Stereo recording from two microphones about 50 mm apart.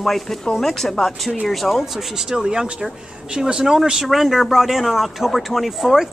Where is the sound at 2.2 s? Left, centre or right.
Centre.